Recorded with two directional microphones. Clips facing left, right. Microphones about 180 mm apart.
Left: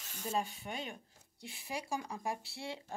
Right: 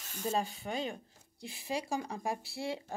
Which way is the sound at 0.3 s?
35° right (ahead or behind).